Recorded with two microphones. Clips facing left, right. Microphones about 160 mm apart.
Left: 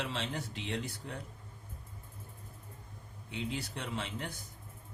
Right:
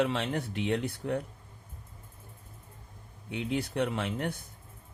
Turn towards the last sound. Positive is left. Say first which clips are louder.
# right 7 dB
turn(degrees=-60)  # may be behind; listen again after turning